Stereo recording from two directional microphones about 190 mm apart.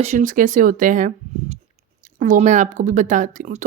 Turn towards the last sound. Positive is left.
turn(degrees=-40)  # may be behind; listen again after turning